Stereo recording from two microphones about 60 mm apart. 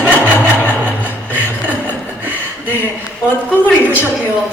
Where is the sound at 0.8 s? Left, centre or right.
Left.